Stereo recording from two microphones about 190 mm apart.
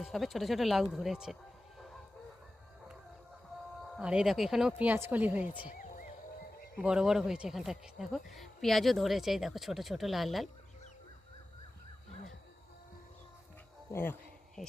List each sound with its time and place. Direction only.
0.0 s speech: centre (ahead or behind)
3.9 s speech: 5° right (ahead or behind)
5.8 s music: 45° left (ahead or behind)
6.7 s speech: 5° right (ahead or behind)
13.9 s insect: 10° left (ahead or behind)